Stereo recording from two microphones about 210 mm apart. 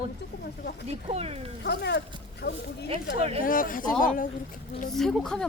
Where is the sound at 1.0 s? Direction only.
30° right (ahead or behind).